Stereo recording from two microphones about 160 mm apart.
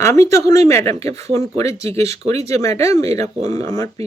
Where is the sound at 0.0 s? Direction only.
20° left (ahead or behind).